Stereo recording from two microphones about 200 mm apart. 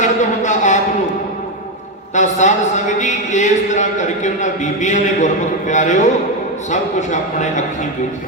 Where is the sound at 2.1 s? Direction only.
35° left (ahead or behind).